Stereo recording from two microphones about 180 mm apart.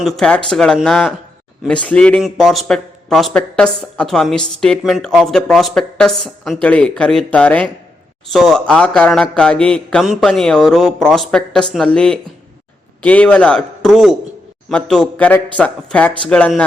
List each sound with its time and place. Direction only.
0.0 s a man's voice: 5° left (ahead or behind)